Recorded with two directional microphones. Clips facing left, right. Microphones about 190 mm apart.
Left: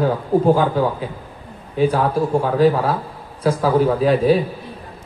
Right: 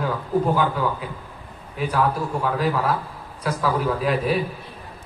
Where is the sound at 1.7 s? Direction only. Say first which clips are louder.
Left 6 dB; 30° left (ahead or behind).